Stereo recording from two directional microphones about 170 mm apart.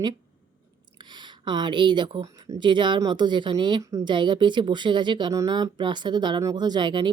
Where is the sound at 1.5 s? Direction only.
25° right (ahead or behind).